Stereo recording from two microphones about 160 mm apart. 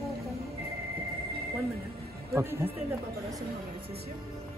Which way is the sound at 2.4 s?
15° right (ahead or behind).